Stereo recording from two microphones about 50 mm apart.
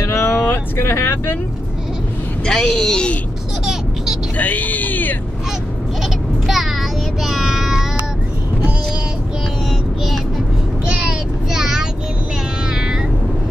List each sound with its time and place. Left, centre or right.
0.1 s music: left
2.4 s speech: centre
3.6 s a sound: centre
4.4 s a sound: left
6.4 s child singing: centre
10.9 s child singing: centre
12.7 s meow: centre